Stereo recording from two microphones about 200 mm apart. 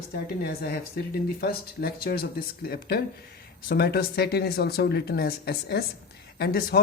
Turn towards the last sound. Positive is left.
turn(degrees=50)  # may be behind; listen again after turning